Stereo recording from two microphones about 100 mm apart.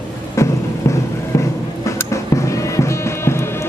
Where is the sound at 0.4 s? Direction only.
30° left (ahead or behind).